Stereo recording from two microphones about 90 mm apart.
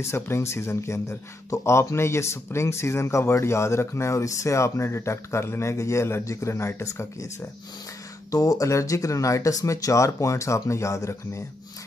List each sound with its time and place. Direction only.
0.0 s speech: 30° left (ahead or behind)
8.3 s speech: 40° left (ahead or behind)